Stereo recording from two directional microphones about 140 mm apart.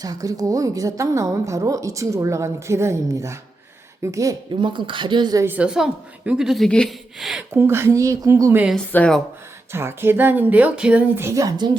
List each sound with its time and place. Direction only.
0.0 s speech: 25° right (ahead or behind)
5.4 s a woman's voice: 10° right (ahead or behind)
7.5 s speech: 20° right (ahead or behind)
8.9 s speech: 10° left (ahead or behind)
9.7 s speech: 15° right (ahead or behind); by 11.8 s 30° right (ahead or behind)